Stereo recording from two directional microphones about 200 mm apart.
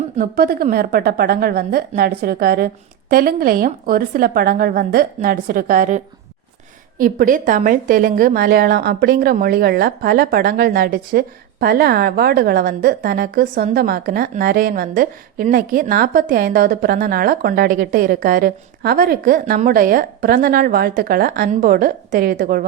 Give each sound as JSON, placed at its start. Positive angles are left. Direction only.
{"t": 0.2, "sound": "a woman's voice", "side_deg": -50}
{"t": 7.0, "sound": "a woman's voice", "side_deg": -45}